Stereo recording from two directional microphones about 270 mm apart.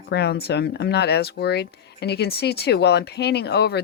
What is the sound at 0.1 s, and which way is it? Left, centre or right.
Speech, left.